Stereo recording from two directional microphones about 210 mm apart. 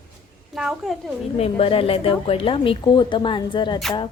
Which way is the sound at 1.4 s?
25° left (ahead or behind).